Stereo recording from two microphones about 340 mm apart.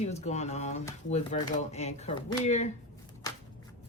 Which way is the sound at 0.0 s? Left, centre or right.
Centre.